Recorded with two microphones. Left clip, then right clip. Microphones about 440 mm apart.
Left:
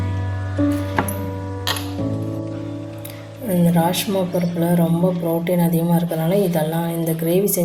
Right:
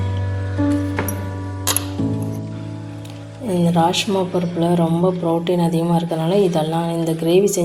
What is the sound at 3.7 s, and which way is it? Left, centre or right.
Speech, left.